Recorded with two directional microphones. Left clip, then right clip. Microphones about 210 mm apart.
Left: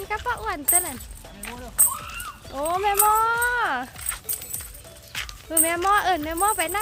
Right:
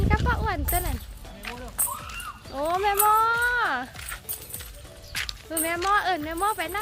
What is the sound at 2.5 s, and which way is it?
Speech, 5° left (ahead or behind).